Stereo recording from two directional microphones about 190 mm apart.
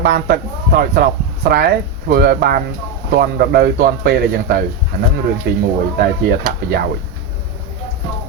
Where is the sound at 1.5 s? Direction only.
55° right (ahead or behind).